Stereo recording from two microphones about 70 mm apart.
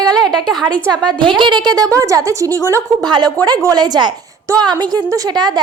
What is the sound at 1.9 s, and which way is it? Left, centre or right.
Speech, right.